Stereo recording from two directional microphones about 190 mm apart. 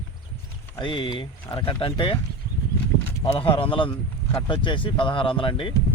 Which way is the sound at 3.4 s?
30° left (ahead or behind).